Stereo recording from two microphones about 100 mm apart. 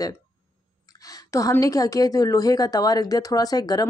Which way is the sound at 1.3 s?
35° left (ahead or behind).